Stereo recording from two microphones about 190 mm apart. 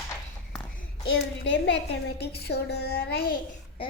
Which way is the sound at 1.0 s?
70° left (ahead or behind).